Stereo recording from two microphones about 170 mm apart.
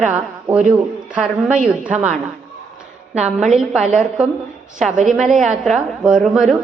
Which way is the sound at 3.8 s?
45° right (ahead or behind).